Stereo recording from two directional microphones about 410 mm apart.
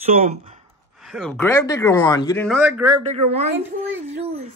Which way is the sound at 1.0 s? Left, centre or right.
Centre.